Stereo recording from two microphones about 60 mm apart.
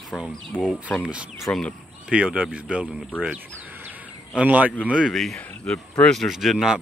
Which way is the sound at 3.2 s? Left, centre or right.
Right.